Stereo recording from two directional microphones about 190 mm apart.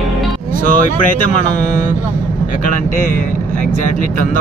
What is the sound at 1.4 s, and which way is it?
Speech, 40° left (ahead or behind).